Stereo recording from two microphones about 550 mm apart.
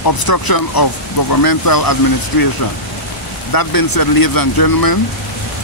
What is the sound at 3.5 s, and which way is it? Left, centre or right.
Speech, left.